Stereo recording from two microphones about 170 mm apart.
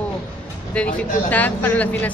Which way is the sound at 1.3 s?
10° left (ahead or behind).